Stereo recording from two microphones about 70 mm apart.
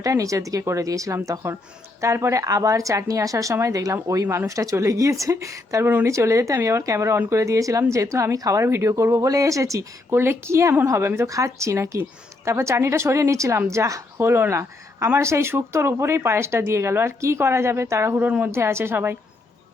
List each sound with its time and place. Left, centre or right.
0.0 s speech: right
2.4 s speech: right
5.8 s speech: right
6.1 s speech: right
9.1 s speech: right
10.2 s speech: right
11.3 s speech: right
14.2 s speech: right
18.2 s speech: right
18.5 s speech: right